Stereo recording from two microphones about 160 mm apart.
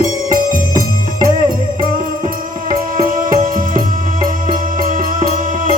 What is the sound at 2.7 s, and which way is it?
Music, 60° right (ahead or behind).